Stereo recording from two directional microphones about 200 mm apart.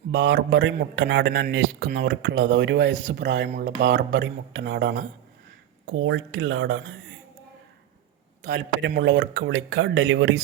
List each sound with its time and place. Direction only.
0.1 s a man's voice: 80° right; by 5.0 s 60° right (ahead or behind)
5.8 s speech: 75° right (ahead or behind)
8.4 s speech: 65° right (ahead or behind)